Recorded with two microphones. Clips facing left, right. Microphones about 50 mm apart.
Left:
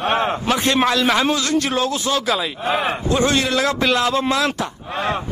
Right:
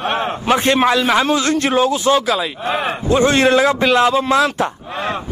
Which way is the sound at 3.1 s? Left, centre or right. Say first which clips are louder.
Right 7 dB; right.